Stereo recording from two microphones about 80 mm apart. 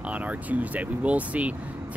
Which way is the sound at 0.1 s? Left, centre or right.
Centre.